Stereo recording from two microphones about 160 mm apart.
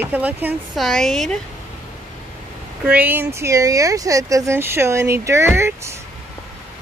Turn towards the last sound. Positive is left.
turn(degrees=-15)  # may be behind; listen again after turning